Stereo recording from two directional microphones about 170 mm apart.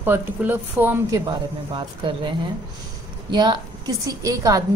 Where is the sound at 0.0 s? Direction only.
10° right (ahead or behind).